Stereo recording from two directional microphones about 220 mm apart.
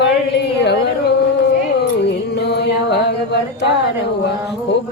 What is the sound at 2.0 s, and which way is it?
Music, 50° left (ahead or behind).